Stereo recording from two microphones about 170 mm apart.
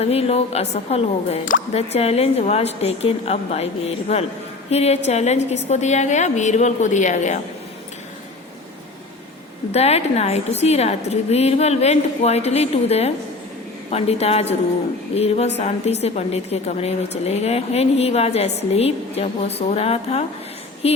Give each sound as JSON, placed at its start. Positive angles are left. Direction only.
{"t": 0.0, "sound": "a woman's voice", "side_deg": 35}
{"t": 9.7, "sound": "a woman's voice", "side_deg": 40}